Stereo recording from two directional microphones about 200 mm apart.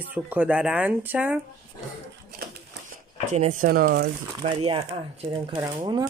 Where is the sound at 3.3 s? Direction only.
35° right (ahead or behind).